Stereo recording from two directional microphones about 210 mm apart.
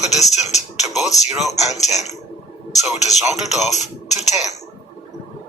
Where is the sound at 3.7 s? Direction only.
35° left (ahead or behind).